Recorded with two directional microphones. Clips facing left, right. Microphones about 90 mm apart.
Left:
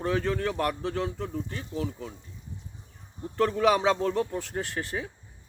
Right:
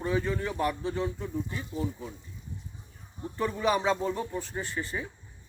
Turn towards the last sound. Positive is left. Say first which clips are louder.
# left 2 dB
turn(degrees=90)